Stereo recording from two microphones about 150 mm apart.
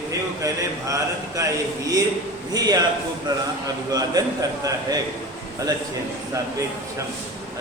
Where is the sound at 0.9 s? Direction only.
20° right (ahead or behind).